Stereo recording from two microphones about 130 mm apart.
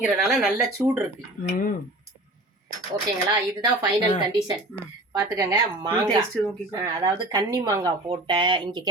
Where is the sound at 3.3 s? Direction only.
35° right (ahead or behind).